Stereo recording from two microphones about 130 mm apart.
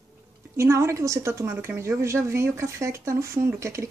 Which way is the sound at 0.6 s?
20° right (ahead or behind).